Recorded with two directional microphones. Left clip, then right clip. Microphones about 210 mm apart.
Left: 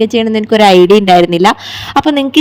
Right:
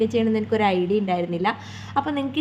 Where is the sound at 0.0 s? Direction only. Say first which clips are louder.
Left 10 dB; 40° left (ahead or behind).